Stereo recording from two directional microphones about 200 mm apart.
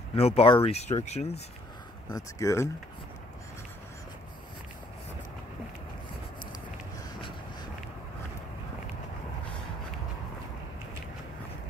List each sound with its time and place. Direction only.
0.1 s speech: 30° left (ahead or behind)
2.0 s speech: 15° left (ahead or behind)